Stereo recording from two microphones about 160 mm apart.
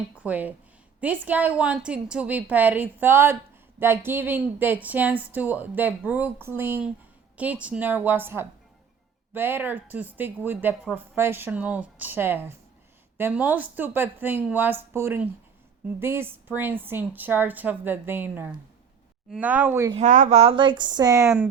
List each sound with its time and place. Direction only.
0.2 s a woman's voice: 10° right (ahead or behind)
20.0 s speech: 50° right (ahead or behind); by 21.5 s 15° right (ahead or behind)